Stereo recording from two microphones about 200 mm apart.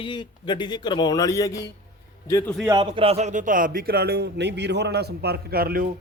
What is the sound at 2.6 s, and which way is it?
Speech, 20° right (ahead or behind).